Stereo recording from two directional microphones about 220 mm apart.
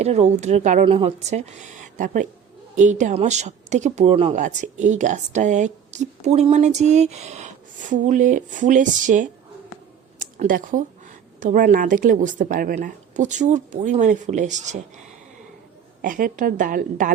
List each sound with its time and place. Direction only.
0.0 s speech: 30° right (ahead or behind)
16.0 s speech: 40° right (ahead or behind)